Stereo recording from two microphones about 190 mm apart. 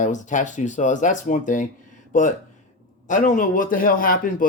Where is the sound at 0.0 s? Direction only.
40° left (ahead or behind).